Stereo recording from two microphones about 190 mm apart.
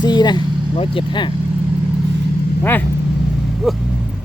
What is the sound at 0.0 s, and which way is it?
Speech, 25° left (ahead or behind).